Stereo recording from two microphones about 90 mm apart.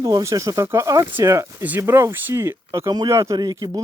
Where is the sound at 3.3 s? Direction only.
45° right (ahead or behind).